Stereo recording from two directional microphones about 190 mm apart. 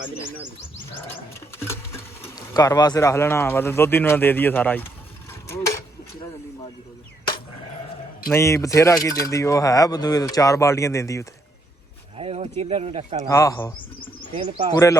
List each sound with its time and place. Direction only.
1.5 s speech: 15° left (ahead or behind)
5.5 s a sound: 15° left (ahead or behind)
8.3 s speech: 15° left (ahead or behind)
12.1 s speech: 30° right (ahead or behind)
13.2 s speech: 15° left (ahead or behind)